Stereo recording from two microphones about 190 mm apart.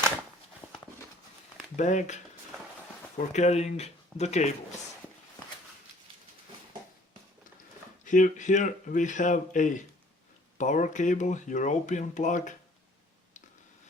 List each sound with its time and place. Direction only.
0.6 s horse: 5° left (ahead or behind)
1.7 s speech: 40° left (ahead or behind)
8.0 s speech: 40° left (ahead or behind)